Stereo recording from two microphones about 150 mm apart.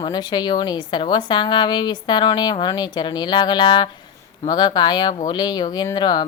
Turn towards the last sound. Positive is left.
turn(degrees=30)  # may be behind; listen again after turning